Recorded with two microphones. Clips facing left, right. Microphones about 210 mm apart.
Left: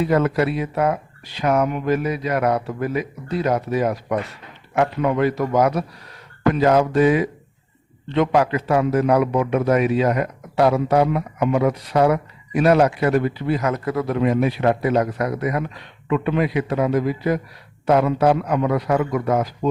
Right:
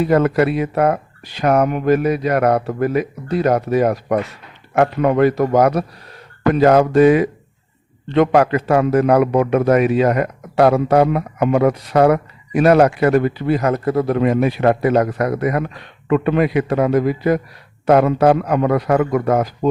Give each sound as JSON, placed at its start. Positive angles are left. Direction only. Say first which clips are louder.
{"t": 0.0, "sound": "a man's voice", "louder": "right 4 dB", "side_deg": -55}
{"t": 6.5, "sound": "a man's voice", "louder": "right 4 dB", "side_deg": -60}
{"t": 13.7, "sound": "a man's voice", "louder": "right 5 dB", "side_deg": -30}
{"t": 14.1, "sound": "a man's voice", "louder": "right 1 dB", "side_deg": -55}